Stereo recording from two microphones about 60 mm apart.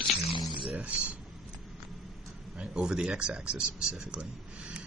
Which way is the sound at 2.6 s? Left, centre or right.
Centre.